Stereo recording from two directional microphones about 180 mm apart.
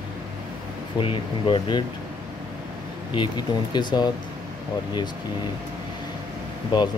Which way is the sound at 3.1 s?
25° left (ahead or behind).